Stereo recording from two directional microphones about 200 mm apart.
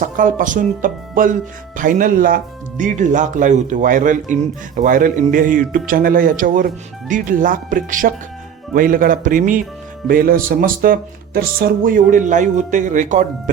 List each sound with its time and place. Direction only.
0.0 s speech: 40° right (ahead or behind)